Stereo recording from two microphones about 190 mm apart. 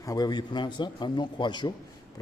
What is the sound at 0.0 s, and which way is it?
Speech, 20° left (ahead or behind).